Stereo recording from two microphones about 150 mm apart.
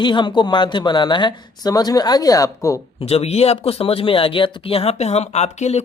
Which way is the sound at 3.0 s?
45° left (ahead or behind).